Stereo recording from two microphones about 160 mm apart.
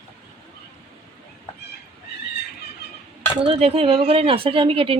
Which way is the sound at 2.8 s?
90° left.